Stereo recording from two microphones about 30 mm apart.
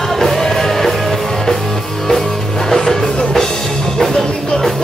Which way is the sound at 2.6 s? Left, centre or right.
Centre.